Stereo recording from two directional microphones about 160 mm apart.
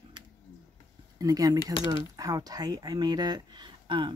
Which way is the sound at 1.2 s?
20° right (ahead or behind).